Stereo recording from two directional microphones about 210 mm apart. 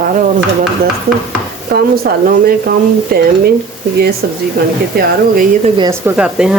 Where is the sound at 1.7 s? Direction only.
45° right (ahead or behind).